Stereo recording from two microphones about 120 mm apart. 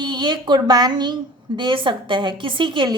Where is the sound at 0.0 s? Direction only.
35° right (ahead or behind).